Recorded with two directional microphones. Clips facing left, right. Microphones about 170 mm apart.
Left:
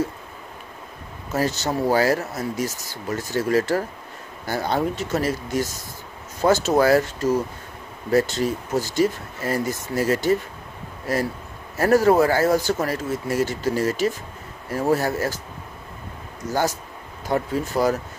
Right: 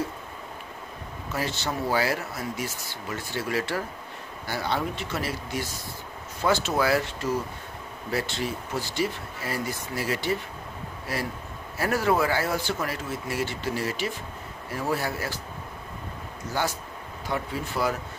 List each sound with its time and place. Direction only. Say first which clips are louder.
1.3 s speech: left 7 dB; 40° left (ahead or behind)
16.5 s speech: left 6 dB; 40° left (ahead or behind)